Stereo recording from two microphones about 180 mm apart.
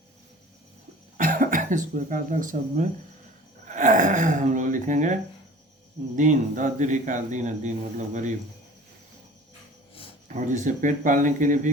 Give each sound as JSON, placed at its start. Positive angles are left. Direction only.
{"t": 1.1, "sound": "speech", "side_deg": -50}
{"t": 6.1, "sound": "speech", "side_deg": -45}
{"t": 10.2, "sound": "speech", "side_deg": -45}